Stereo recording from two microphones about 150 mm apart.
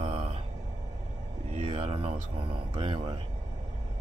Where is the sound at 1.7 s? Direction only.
40° right (ahead or behind).